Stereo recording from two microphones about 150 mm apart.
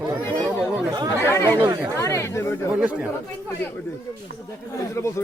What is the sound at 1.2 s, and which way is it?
Speech, 15° left (ahead or behind).